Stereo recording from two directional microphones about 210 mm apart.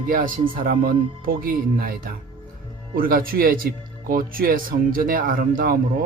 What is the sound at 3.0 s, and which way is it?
Speech, 45° right (ahead or behind).